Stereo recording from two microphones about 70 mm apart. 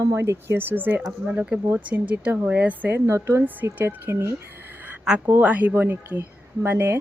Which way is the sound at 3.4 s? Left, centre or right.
Right.